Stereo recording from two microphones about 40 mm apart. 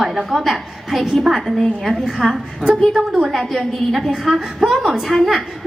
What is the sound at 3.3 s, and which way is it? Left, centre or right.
A woman's voice, centre.